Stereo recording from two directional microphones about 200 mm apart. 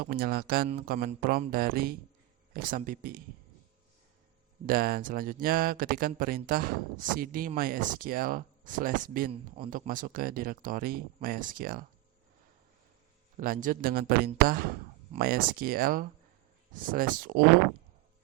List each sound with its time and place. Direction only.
0.0 s speech: 50° right (ahead or behind)
4.6 s speech: 50° right (ahead or behind)
13.3 s speech: 45° right (ahead or behind)